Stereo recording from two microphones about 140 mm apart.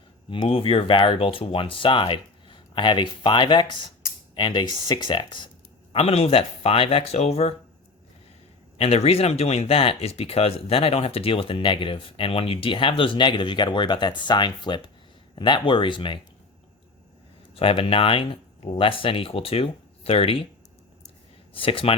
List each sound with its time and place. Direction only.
0.4 s speech: 40° left (ahead or behind)
5.9 s speech: 45° left (ahead or behind)
8.8 s speech: 45° left (ahead or behind)
17.5 s speech: 40° left (ahead or behind)
21.5 s speech: 40° left (ahead or behind)